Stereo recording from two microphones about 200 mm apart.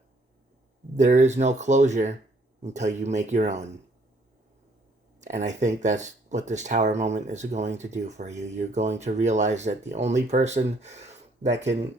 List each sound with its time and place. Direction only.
0.9 s speech: 35° right (ahead or behind)
5.2 s speech: 35° right (ahead or behind)